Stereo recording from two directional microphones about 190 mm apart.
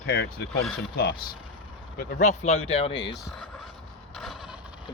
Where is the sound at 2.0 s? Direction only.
40° left (ahead or behind).